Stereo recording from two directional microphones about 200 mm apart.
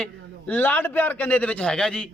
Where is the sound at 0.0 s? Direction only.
5° left (ahead or behind).